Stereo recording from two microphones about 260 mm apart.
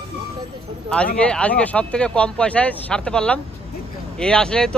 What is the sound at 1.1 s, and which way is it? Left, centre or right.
Speech, centre.